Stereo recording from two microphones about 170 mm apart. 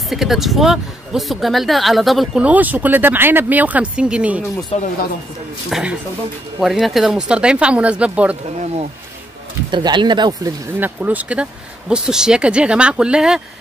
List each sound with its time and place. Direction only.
0.1 s speech: centre (ahead or behind)
4.7 s speech: 35° left (ahead or behind)
5.7 s speech: 5° right (ahead or behind)
9.7 s speech: 30° right (ahead or behind)
10.8 s speech: 10° right (ahead or behind)